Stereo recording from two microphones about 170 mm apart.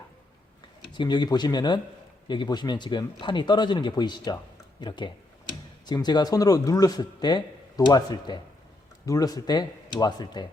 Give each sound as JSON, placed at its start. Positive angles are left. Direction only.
{"t": 0.9, "sound": "speech", "side_deg": 25}